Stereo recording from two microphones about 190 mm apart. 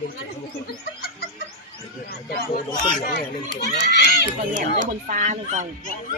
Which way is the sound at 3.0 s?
60° left (ahead or behind).